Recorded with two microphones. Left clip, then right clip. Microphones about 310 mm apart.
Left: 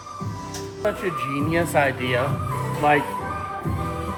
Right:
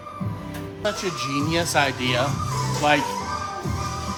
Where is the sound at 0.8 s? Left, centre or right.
Centre.